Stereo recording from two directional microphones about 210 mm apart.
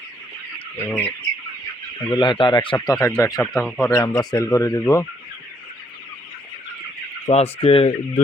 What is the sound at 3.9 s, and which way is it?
Speech, 20° left (ahead or behind).